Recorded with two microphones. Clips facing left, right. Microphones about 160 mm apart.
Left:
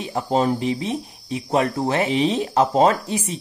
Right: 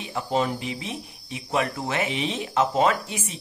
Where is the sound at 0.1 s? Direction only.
35° left (ahead or behind).